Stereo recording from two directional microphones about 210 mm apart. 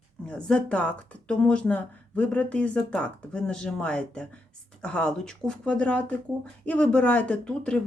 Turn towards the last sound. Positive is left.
turn(degrees=5)  # may be behind; listen again after turning